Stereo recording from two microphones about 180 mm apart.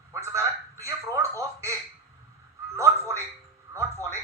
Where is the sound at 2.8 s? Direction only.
15° right (ahead or behind).